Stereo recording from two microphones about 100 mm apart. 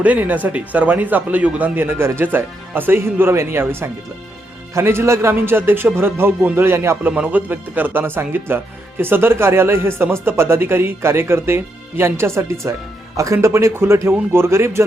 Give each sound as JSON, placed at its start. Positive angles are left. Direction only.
{"t": 0.0, "sound": "speech", "side_deg": -15}